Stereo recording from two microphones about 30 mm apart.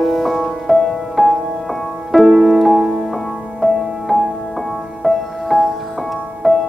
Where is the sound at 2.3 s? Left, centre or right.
Centre.